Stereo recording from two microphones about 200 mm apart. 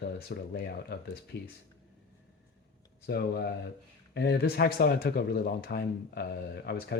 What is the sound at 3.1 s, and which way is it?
Speech, 55° left (ahead or behind).